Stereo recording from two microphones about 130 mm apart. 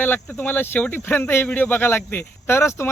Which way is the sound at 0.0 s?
15° left (ahead or behind).